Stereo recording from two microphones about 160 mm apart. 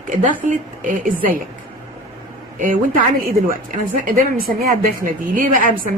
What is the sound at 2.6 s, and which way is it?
Speech, 55° right (ahead or behind).